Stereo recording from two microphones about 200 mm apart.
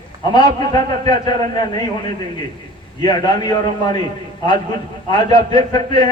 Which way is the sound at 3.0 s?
20° left (ahead or behind).